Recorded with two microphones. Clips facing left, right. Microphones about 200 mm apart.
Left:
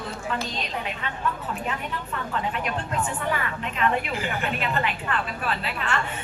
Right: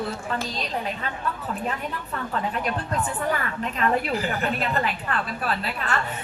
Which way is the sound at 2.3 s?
40° right (ahead or behind).